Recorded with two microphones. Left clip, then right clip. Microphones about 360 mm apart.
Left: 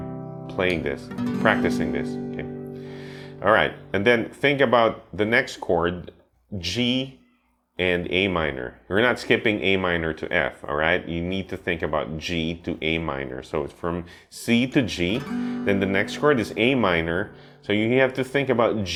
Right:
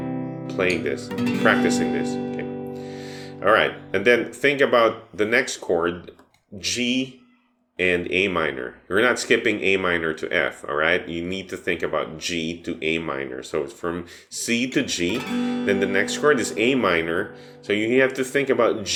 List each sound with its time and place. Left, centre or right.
0.4 s speech: left